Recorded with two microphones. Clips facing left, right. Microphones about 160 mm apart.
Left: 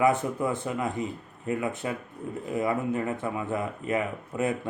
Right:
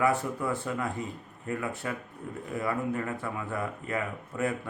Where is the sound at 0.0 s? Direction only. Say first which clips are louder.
Left 3 dB; 20° left (ahead or behind).